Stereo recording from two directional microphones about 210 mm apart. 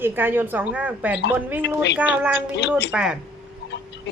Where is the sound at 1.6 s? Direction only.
55° left (ahead or behind).